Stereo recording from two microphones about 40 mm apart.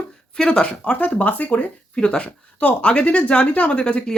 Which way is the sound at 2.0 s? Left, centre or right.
Left.